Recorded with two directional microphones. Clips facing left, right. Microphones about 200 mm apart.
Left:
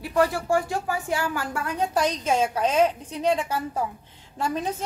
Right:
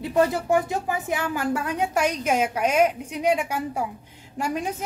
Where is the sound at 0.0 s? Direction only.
20° right (ahead or behind).